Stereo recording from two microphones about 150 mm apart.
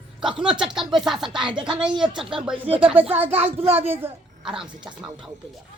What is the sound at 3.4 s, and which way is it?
Speech, 45° right (ahead or behind).